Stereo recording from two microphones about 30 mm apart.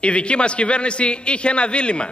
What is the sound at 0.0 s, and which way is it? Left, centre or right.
A man's voice, left.